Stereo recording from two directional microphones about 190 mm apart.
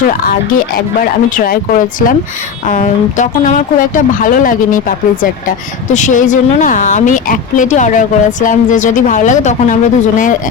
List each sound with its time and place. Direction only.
0.1 s speech: 45° left (ahead or behind)